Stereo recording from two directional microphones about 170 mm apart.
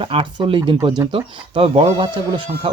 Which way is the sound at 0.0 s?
30° right (ahead or behind).